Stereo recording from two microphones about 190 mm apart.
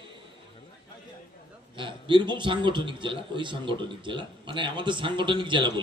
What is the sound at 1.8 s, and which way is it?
A man's voice, 25° right (ahead or behind).